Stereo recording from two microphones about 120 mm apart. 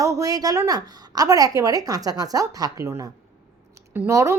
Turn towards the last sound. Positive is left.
turn(degrees=-25)  # may be behind; listen again after turning